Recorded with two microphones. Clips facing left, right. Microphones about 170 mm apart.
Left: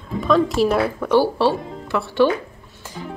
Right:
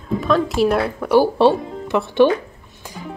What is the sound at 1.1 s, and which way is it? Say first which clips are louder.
Speech: right 4 dB; 20° right (ahead or behind).